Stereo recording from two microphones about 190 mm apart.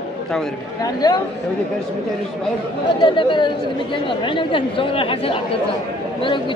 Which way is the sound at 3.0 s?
25° left (ahead or behind).